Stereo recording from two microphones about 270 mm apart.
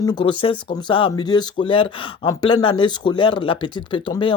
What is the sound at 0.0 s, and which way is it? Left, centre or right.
Speech, centre.